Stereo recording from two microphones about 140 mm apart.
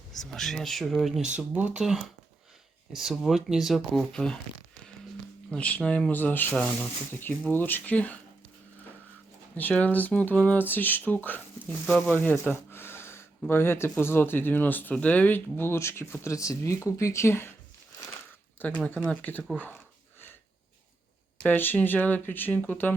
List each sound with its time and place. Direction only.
0.1 s speech: 5° left (ahead or behind)
5.5 s speech: 10° left (ahead or behind)
9.6 s speech: 10° left (ahead or behind)
18.6 s speech: 10° left (ahead or behind)
21.4 s speech: 15° left (ahead or behind)